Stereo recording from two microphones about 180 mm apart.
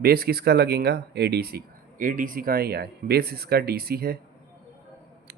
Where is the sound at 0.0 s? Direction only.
60° right (ahead or behind).